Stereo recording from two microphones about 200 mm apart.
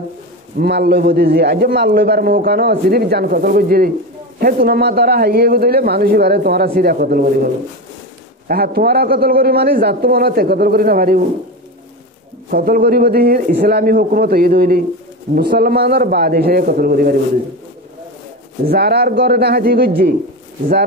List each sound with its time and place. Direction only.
0.6 s a man's voice: 55° right (ahead or behind)
12.4 s a man's voice: 45° right (ahead or behind)
18.7 s a man's voice: 55° right (ahead or behind)